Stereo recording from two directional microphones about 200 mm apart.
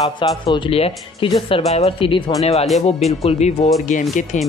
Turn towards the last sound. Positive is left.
turn(degrees=35)  # may be behind; listen again after turning